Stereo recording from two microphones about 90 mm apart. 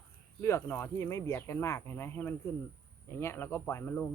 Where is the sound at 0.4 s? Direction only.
30° left (ahead or behind).